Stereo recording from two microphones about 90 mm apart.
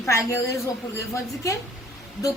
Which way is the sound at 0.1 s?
35° left (ahead or behind).